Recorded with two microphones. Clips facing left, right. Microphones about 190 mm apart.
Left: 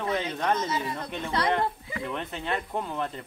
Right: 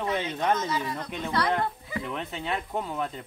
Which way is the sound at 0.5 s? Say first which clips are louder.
Even; 25° left (ahead or behind).